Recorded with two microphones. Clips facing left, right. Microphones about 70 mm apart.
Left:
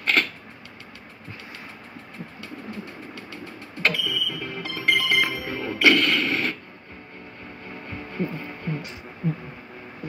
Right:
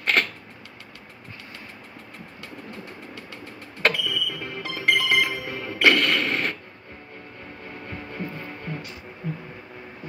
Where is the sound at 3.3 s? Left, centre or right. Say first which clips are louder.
Left 2 dB; right.